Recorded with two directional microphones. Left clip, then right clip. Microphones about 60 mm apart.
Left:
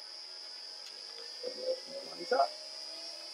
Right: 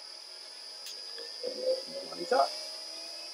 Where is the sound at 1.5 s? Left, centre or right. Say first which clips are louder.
Right 5 dB; centre.